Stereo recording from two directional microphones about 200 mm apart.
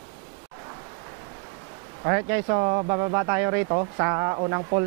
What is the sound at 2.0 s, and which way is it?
Speech, 15° right (ahead or behind).